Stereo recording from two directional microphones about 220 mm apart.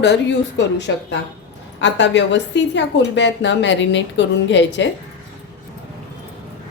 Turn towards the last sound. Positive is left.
turn(degrees=55)  # may be behind; listen again after turning